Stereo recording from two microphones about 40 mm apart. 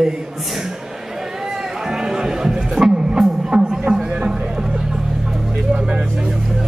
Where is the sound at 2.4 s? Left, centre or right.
Centre.